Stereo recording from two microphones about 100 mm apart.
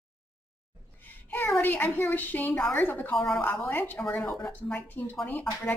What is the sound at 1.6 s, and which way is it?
A woman's voice, 20° left (ahead or behind).